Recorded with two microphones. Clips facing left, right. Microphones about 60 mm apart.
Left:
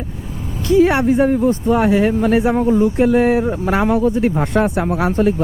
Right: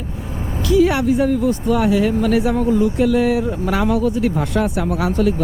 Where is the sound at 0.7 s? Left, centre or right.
Left.